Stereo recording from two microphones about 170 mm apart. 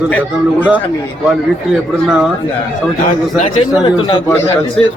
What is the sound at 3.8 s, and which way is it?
Speech, 30° left (ahead or behind).